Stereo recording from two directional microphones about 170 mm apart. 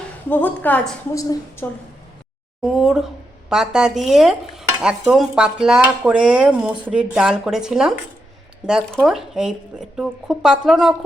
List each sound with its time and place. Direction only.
0.3 s a woman's voice: 10° left (ahead or behind)
1.2 s a woman's voice: 20° left (ahead or behind)
2.7 s stir: 5° right (ahead or behind)